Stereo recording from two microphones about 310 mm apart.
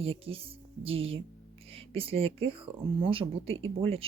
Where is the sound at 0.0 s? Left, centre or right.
Centre.